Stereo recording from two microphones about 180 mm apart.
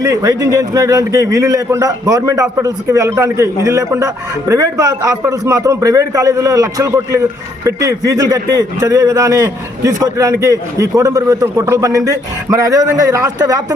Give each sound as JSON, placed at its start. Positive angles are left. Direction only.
{"t": 0.0, "sound": "a man's voice", "side_deg": -15}